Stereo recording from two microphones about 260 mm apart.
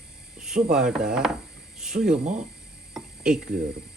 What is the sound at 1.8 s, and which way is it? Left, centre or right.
Speech, centre.